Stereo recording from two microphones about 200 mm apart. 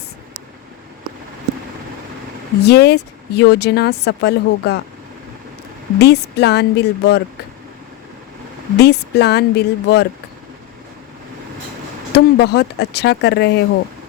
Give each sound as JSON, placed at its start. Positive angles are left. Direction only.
{"t": 2.6, "sound": "speech", "side_deg": 55}
{"t": 6.0, "sound": "speech", "side_deg": 55}
{"t": 8.8, "sound": "speech", "side_deg": 55}
{"t": 12.1, "sound": "speech", "side_deg": 55}